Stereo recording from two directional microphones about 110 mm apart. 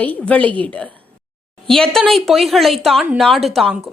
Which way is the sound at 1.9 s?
5° left (ahead or behind).